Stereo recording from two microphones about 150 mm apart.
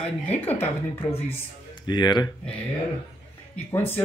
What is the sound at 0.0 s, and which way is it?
Speech, 10° left (ahead or behind).